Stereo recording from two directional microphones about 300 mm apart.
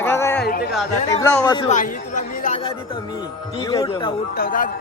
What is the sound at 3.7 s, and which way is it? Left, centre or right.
Speech, centre.